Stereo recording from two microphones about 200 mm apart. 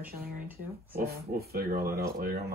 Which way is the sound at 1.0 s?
50° right (ahead or behind).